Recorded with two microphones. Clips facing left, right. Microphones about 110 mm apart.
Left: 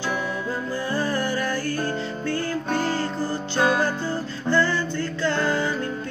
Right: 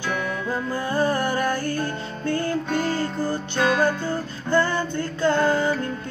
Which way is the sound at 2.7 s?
30° left (ahead or behind).